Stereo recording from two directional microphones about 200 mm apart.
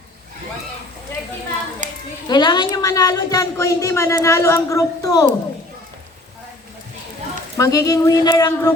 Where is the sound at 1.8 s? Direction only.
40° right (ahead or behind).